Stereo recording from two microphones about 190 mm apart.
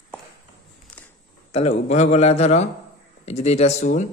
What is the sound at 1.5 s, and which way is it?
A man's voice, 35° left (ahead or behind).